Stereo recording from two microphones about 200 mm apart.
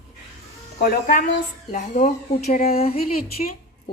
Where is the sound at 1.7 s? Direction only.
35° left (ahead or behind).